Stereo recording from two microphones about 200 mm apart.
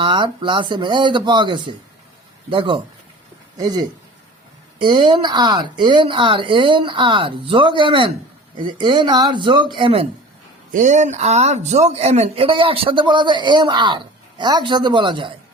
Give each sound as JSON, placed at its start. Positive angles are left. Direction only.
{"t": 0.0, "sound": "a man's voice", "side_deg": -25}
{"t": 10.7, "sound": "a man's voice", "side_deg": -40}